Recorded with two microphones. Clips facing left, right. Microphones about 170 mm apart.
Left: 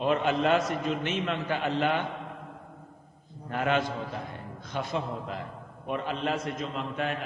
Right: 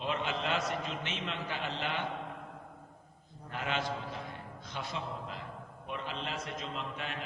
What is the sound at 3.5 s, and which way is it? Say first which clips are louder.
A man's voice: left 8 dB; 55° left (ahead or behind).